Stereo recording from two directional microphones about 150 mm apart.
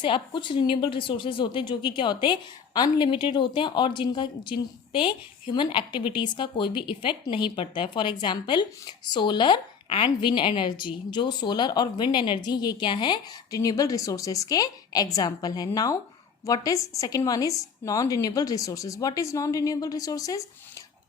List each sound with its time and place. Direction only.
0.0 s a woman's voice: 35° left (ahead or behind)